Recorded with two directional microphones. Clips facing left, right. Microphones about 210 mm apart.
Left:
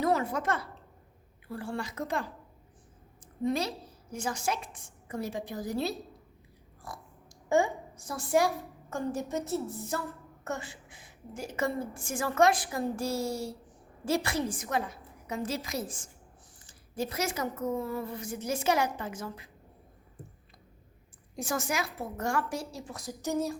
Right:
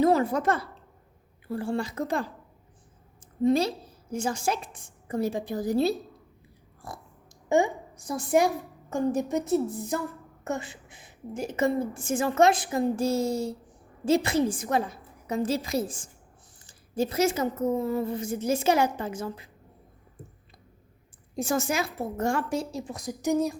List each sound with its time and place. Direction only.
0.0 s a sound: 30° right (ahead or behind)
1.5 s a woman's voice: 25° right (ahead or behind)
3.4 s a woman's voice: 30° right (ahead or behind)
7.5 s a woman's voice: 15° right (ahead or behind)
21.3 s a woman's voice: 25° right (ahead or behind)